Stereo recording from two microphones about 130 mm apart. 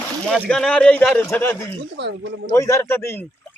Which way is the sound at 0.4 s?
5° left (ahead or behind).